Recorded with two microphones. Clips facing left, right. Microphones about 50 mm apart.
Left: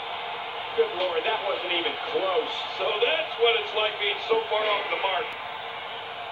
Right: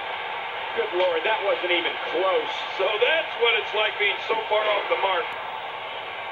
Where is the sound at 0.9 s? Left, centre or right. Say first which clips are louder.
Right 4 dB; right.